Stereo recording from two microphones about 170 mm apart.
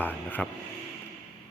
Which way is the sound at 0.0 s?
10° left (ahead or behind).